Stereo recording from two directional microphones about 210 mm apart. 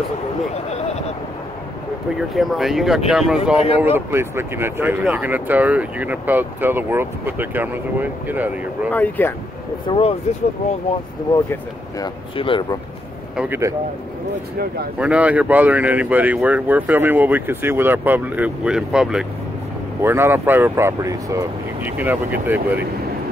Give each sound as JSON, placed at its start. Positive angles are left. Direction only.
{"t": 2.1, "sound": "speech", "side_deg": 0}
{"t": 8.9, "sound": "speech", "side_deg": 10}
{"t": 9.8, "sound": "speech", "side_deg": 25}
{"t": 12.0, "sound": "speech", "side_deg": 25}
{"t": 13.4, "sound": "speech", "side_deg": -10}
{"t": 15.0, "sound": "speech", "side_deg": -5}